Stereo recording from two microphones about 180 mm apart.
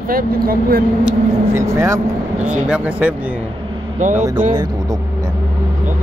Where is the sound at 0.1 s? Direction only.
55° right (ahead or behind).